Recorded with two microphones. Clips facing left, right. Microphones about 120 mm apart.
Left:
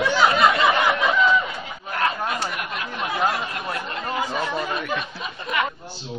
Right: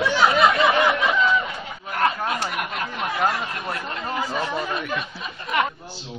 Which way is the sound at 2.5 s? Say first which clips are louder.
Right 2 dB; 55° right (ahead or behind).